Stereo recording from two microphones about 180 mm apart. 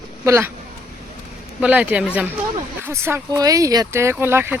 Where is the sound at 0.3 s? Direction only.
15° right (ahead or behind).